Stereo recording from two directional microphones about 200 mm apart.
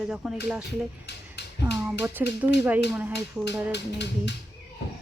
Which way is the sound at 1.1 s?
55° left (ahead or behind).